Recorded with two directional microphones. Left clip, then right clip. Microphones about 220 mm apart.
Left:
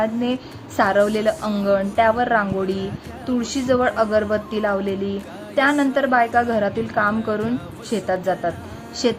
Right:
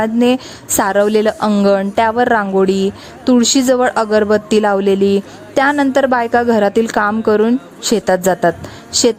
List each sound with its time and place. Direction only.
0.0 s a woman's voice: 45° right (ahead or behind)